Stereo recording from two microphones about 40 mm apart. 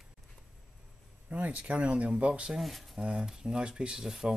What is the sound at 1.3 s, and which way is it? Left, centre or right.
Speech, right.